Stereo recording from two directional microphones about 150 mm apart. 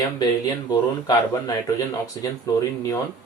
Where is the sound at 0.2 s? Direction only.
25° left (ahead or behind).